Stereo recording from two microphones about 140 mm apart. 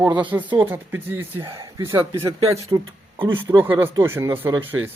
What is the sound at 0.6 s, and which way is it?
Speech, 15° right (ahead or behind).